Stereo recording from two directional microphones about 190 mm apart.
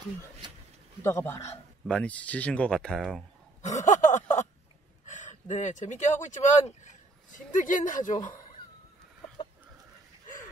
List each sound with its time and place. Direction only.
1.0 s a man's voice: 15° left (ahead or behind)
3.6 s speech: 40° left (ahead or behind)